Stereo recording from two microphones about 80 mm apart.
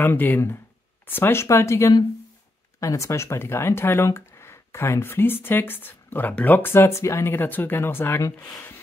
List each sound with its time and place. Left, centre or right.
0.0 s speech: left